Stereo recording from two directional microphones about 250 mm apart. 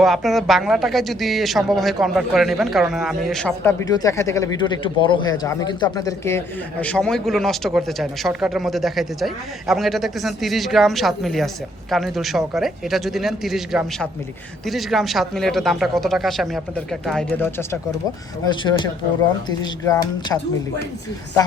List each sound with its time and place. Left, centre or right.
0.0 s speech: centre